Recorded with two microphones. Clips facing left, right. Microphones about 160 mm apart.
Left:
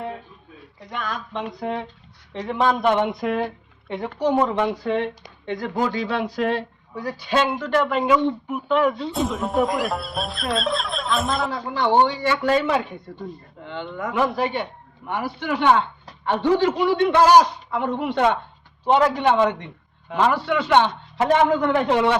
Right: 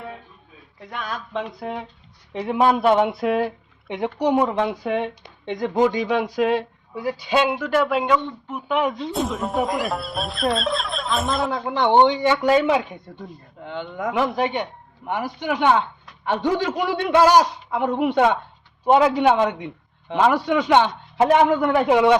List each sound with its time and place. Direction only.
0.9 s speech: centre (ahead or behind)
3.8 s speech: 15° right (ahead or behind)
5.5 s speech: 20° right (ahead or behind)
8.0 s speech: 5° left (ahead or behind)
8.6 s speech: 15° right (ahead or behind)
9.1 s speech: centre (ahead or behind)
11.7 s speech: 20° right (ahead or behind)